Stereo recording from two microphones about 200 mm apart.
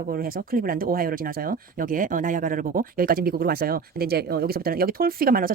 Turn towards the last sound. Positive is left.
turn(degrees=-45)  # may be behind; listen again after turning